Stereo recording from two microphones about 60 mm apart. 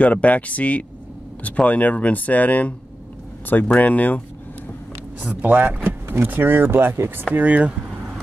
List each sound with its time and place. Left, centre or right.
0.0 s speech: left
5.2 s speech: right
7.3 s speech: right